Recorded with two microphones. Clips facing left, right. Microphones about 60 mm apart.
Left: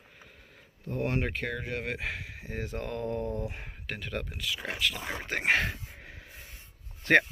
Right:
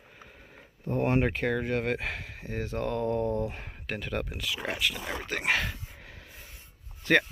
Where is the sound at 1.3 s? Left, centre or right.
Centre.